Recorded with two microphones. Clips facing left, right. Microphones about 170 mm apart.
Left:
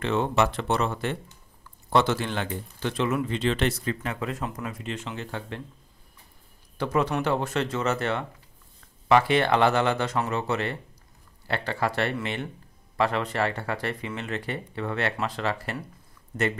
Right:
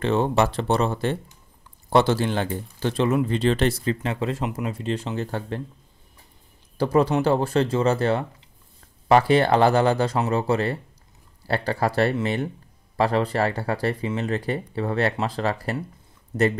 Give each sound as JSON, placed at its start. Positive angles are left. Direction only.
{"t": 0.0, "sound": "speech", "side_deg": -35}
{"t": 4.5, "sound": "speech", "side_deg": -15}
{"t": 4.7, "sound": "speech", "side_deg": -35}
{"t": 6.8, "sound": "speech", "side_deg": -35}